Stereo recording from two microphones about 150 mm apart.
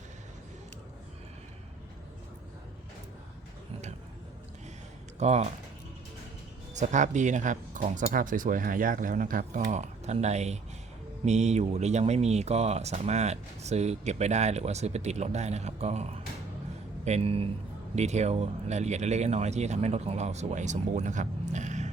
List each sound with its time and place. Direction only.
5.2 s speech: 45° right (ahead or behind)
6.7 s a man's voice: 55° right (ahead or behind)